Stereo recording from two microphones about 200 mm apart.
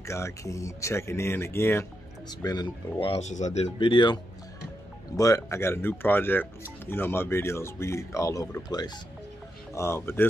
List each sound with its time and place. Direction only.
0.0 s speech: 15° left (ahead or behind); by 3.6 s 35° left (ahead or behind)
3.8 s speech: 25° left (ahead or behind)